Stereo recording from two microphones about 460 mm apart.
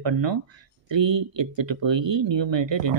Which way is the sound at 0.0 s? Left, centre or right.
Right.